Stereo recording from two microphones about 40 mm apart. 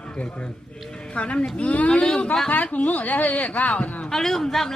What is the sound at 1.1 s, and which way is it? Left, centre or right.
Speech, left.